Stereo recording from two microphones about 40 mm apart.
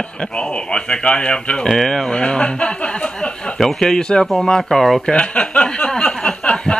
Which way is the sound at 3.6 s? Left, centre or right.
Centre.